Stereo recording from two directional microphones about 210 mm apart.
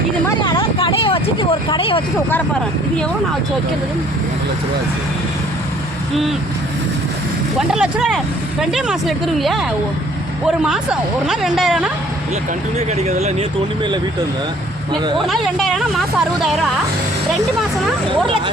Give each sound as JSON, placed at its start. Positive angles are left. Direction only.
{"t": 0.4, "sound": "speech", "side_deg": 20}
{"t": 7.7, "sound": "speech", "side_deg": -5}
{"t": 11.3, "sound": "speech", "side_deg": 0}
{"t": 13.0, "sound": "speech", "side_deg": -30}
{"t": 15.3, "sound": "speech", "side_deg": 0}